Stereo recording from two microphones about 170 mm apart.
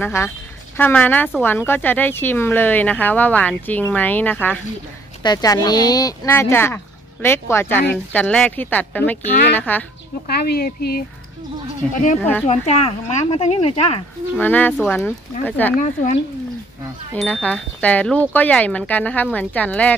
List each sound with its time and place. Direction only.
0.0 s a woman's voice: 15° left (ahead or behind)
5.2 s a woman's voice: 20° left (ahead or behind)
10.2 s speech: 65° left (ahead or behind)
11.9 s speech: 50° left (ahead or behind)
14.4 s a woman's voice: 10° left (ahead or behind)
15.8 s speech: 50° left (ahead or behind)
17.1 s a woman's voice: 5° left (ahead or behind)